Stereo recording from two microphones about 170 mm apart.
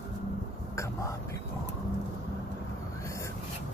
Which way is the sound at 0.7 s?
15° left (ahead or behind).